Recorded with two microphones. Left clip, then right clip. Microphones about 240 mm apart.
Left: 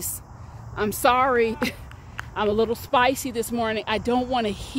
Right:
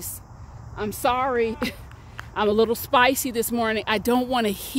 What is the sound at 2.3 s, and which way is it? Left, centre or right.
Speech, right.